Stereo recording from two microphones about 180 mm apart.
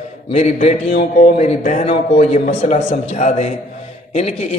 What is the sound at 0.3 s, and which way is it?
Speech, 40° left (ahead or behind).